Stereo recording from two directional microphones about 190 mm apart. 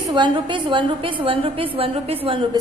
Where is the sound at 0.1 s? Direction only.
25° right (ahead or behind).